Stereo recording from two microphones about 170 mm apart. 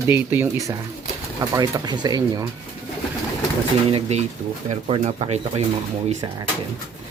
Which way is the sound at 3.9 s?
35° right (ahead or behind).